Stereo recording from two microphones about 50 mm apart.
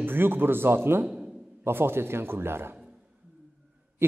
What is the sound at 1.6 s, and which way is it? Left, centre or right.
Speech, right.